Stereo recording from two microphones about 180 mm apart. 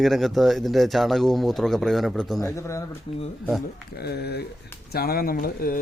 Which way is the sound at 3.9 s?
65° left (ahead or behind).